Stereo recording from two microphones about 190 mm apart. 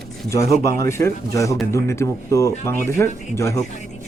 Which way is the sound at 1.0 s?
15° left (ahead or behind).